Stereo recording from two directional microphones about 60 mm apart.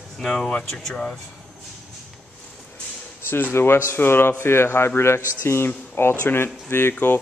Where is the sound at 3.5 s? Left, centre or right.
Left.